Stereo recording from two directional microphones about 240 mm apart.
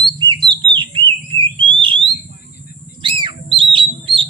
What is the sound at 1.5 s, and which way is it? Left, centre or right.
Alarm, right.